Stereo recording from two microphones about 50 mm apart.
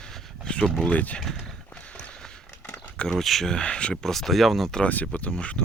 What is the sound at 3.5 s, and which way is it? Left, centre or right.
Speech, left.